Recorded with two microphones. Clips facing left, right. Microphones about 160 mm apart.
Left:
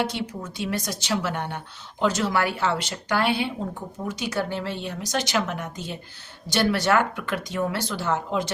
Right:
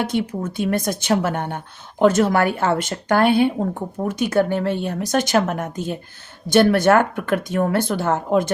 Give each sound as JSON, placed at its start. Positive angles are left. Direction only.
{"t": 0.0, "sound": "speech", "side_deg": -50}